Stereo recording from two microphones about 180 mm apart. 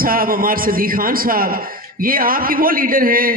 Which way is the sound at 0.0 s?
55° right (ahead or behind).